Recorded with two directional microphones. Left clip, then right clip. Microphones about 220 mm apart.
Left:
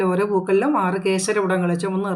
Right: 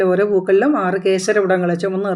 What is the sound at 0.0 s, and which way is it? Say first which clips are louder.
Speech: right 5 dB; centre (ahead or behind).